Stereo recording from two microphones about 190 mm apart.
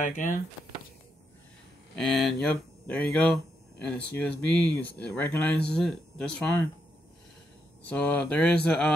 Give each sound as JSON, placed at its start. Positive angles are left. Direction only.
{"t": 0.0, "sound": "speech", "side_deg": 40}
{"t": 2.0, "sound": "speech", "side_deg": 0}
{"t": 7.8, "sound": "speech", "side_deg": 10}